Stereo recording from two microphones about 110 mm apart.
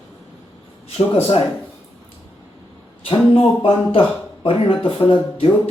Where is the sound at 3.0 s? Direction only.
55° left (ahead or behind).